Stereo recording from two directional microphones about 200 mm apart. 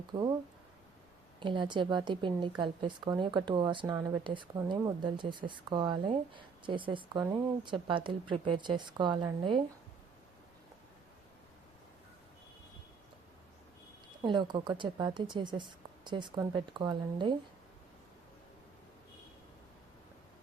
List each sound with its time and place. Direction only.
0.1 s a woman's voice: 20° right (ahead or behind)
1.4 s a woman's voice: 25° right (ahead or behind)
14.2 s a woman's voice: 20° right (ahead or behind)